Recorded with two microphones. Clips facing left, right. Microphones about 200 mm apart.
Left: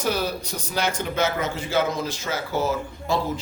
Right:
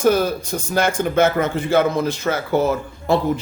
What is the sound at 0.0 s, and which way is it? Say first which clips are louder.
A man's voice: right 8 dB; 50° right (ahead or behind).